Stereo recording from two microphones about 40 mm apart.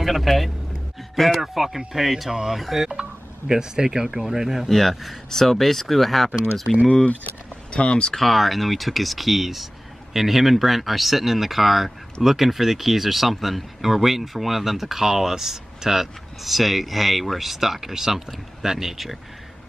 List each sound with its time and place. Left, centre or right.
0.0 s speech: centre
2.9 s speech: centre
4.6 s speech: centre
6.9 s speech: left
8.1 s speech: centre